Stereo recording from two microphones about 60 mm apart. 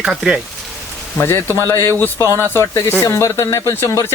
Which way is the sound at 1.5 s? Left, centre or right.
Left.